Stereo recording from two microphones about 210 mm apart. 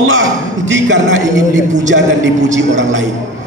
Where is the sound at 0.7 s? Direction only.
60° right (ahead or behind).